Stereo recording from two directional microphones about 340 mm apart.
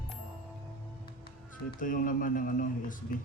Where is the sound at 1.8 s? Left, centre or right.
Left.